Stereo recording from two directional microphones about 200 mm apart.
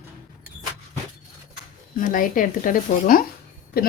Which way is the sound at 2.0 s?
40° left (ahead or behind).